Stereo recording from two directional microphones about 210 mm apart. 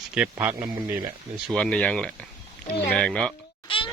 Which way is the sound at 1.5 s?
5° left (ahead or behind).